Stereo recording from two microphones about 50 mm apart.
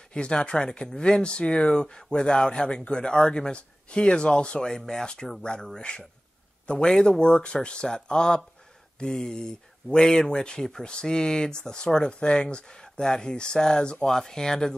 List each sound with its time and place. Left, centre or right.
0.1 s speech: centre